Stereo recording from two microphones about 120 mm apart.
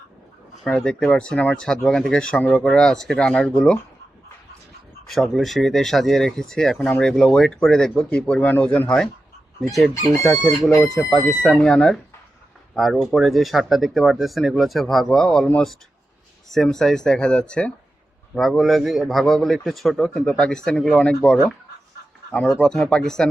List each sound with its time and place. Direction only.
0.6 s speech: 5° left (ahead or behind)
5.0 s speech: centre (ahead or behind)
16.5 s speech: 5° left (ahead or behind)
22.4 s speech: centre (ahead or behind)